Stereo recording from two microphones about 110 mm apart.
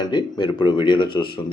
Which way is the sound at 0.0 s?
40° left (ahead or behind).